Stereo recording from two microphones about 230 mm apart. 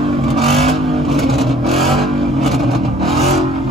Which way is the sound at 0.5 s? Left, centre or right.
Right.